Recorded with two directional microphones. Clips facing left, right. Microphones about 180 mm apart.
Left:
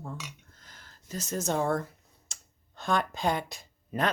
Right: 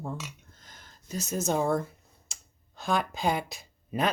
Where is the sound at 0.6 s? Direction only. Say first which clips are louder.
Right 2 dB; 20° right (ahead or behind).